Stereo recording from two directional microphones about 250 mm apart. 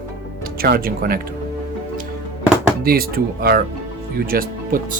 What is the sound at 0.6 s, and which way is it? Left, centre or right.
Speech, right.